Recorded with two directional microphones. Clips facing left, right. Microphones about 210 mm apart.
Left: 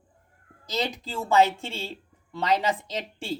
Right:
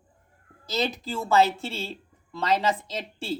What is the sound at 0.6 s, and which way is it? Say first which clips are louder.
A woman's voice: right 2 dB; 15° left (ahead or behind).